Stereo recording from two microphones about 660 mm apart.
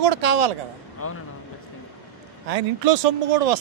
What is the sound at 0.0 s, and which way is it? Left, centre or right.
Speech, right.